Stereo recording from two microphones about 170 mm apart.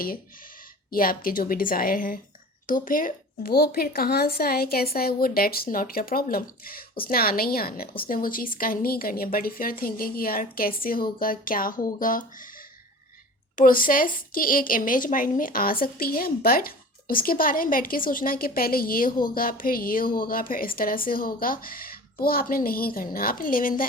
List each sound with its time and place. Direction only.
0.9 s speech: 55° left (ahead or behind)